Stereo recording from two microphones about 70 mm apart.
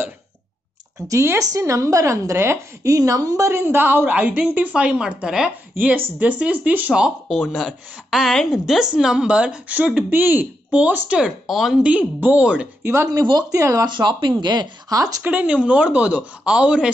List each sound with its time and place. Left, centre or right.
0.9 s a woman's voice: right; by 7.1 s centre
7.5 s speech: centre; by 11.1 s right
11.1 s speech: centre
11.8 s speech: centre
12.8 s speech: right
13.2 s speech: right
13.5 s a woman's voice: right
13.9 s speech: right
15.0 s speech: right
15.2 s speech: right